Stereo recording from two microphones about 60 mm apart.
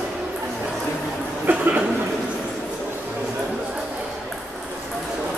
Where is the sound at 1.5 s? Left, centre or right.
Right.